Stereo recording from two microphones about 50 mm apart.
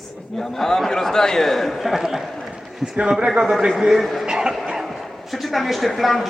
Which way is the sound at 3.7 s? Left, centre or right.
Centre.